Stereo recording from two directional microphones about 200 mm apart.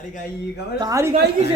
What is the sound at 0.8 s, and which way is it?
Speech, 15° right (ahead or behind).